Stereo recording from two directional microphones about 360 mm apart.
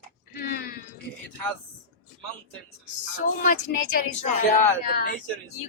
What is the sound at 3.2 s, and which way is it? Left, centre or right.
Speech, left.